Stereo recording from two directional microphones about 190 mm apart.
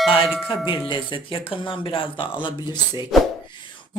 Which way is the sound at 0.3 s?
5° right (ahead or behind).